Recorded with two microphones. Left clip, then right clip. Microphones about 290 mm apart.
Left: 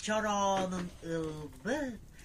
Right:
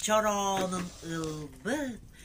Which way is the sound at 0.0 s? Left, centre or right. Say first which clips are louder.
Right 4 dB; left.